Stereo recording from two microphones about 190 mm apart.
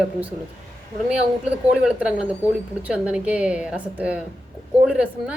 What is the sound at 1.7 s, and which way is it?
A woman's voice, 5° right (ahead or behind).